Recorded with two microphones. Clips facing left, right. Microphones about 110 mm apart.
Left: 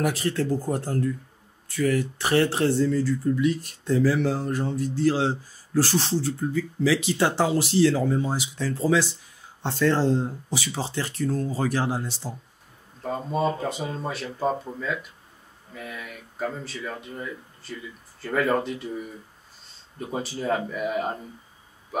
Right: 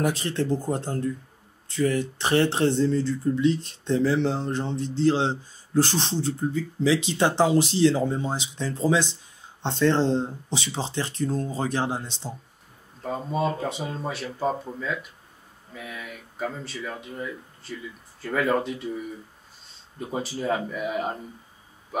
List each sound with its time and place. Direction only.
0.0 s speech: 25° right (ahead or behind)
13.0 s speech: centre (ahead or behind)
20.0 s speech: centre (ahead or behind)